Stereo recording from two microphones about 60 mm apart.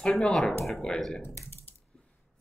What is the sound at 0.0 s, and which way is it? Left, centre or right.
Speech, centre.